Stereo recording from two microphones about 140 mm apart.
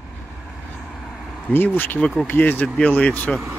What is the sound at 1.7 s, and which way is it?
Speech, 10° left (ahead or behind).